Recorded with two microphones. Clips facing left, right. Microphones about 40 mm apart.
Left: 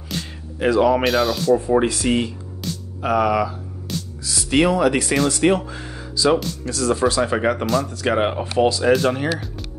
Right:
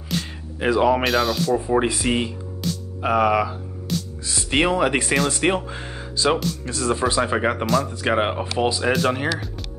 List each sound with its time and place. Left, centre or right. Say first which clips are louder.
0.7 s speech: left 2 dB; centre
1.0 s speech: left 1 dB; centre
1.9 s speech: left 2 dB; centre
6.1 s speech: left 2 dB; right; by 7.8 s centre
7.8 s speech: left 1 dB; centre